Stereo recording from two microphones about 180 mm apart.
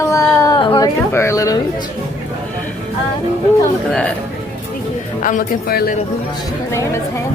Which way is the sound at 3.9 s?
5° left (ahead or behind).